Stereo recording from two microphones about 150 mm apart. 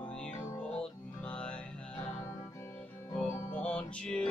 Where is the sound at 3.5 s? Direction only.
10° left (ahead or behind).